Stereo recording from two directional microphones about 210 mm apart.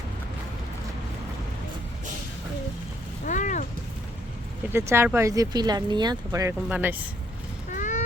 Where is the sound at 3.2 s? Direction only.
35° left (ahead or behind).